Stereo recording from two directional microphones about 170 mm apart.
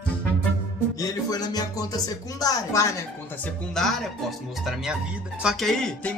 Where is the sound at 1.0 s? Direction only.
20° left (ahead or behind).